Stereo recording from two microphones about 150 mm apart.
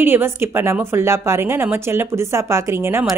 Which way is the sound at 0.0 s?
15° right (ahead or behind).